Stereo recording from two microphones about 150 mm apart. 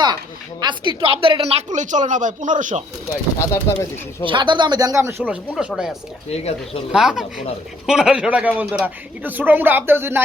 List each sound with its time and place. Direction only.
0.6 s a woman's voice: 30° right (ahead or behind); by 2.8 s 60° right (ahead or behind)
3.1 s speech: 20° left (ahead or behind)
4.3 s speech: 30° right (ahead or behind); by 6.0 s 5° right (ahead or behind)
6.3 s speech: 45° left (ahead or behind)
6.9 s speech: 5° right (ahead or behind)